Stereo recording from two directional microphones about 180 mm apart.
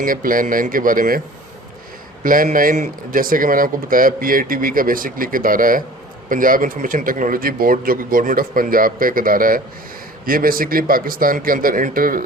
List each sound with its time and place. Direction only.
0.0 s speech: 50° right (ahead or behind)
2.2 s speech: 50° right (ahead or behind)